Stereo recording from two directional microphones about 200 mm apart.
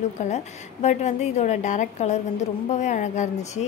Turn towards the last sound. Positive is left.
turn(degrees=35)  # may be behind; listen again after turning